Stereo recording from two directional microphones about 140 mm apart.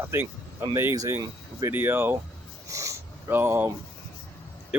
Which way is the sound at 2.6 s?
25° right (ahead or behind).